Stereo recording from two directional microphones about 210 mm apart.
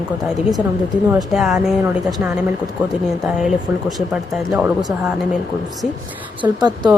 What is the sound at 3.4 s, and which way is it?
Speech, centre (ahead or behind).